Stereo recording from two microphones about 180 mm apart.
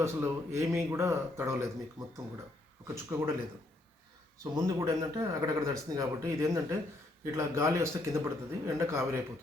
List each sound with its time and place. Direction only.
0.0 s a man's voice: 15° right (ahead or behind)
2.8 s a man's voice: 15° right (ahead or behind)
4.5 s a man's voice: 20° right (ahead or behind)